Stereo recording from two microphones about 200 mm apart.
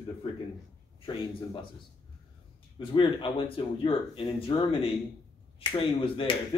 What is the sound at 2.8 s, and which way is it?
Speech, 25° left (ahead or behind).